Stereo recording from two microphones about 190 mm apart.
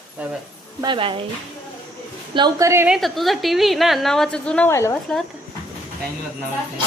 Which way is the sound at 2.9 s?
Centre (ahead or behind).